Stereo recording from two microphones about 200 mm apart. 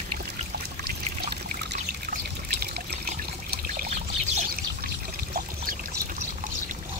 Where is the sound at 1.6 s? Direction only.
55° right (ahead or behind).